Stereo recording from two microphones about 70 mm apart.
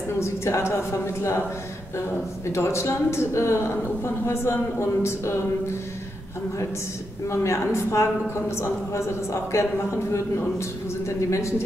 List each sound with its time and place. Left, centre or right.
0.2 s a man's voice: left
7.2 s a man's voice: left